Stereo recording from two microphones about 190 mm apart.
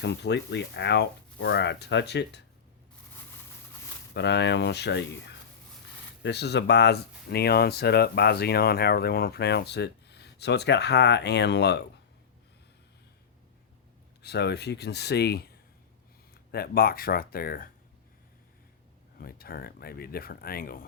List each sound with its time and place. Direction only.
0.0 s speech: 65° left (ahead or behind)
4.1 s speech: 65° left (ahead or behind)
14.2 s speech: 60° left (ahead or behind)
19.2 s speech: 50° left (ahead or behind)